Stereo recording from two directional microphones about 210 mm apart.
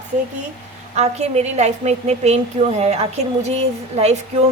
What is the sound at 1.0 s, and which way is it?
A woman's voice, 30° right (ahead or behind).